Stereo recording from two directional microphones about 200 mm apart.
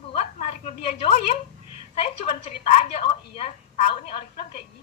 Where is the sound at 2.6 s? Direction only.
30° left (ahead or behind).